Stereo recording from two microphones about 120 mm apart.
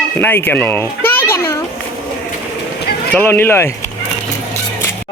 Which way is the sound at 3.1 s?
15° left (ahead or behind).